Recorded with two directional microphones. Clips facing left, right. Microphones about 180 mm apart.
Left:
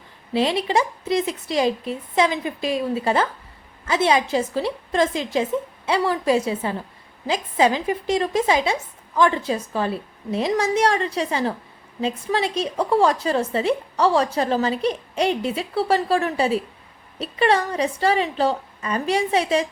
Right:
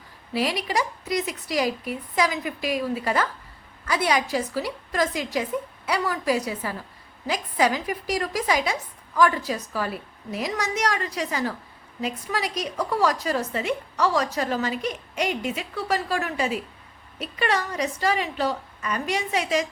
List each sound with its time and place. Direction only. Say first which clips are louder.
0.3 s a woman's voice: left 5 dB; 25° left (ahead or behind)